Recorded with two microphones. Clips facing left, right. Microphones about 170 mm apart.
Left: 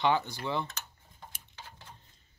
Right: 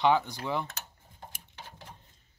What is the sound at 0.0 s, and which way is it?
Speech, 5° right (ahead or behind).